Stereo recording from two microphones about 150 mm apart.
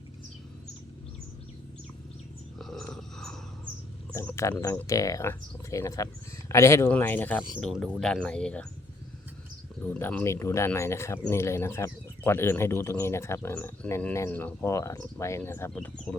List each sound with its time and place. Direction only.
2.6 s a sound: centre (ahead or behind)
4.1 s speech: 15° left (ahead or behind)
9.8 s speech: 10° left (ahead or behind)